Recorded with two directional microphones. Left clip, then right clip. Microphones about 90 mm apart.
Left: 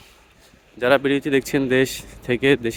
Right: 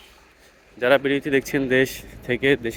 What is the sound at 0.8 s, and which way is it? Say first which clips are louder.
Speech: left 1 dB; 75° left (ahead or behind).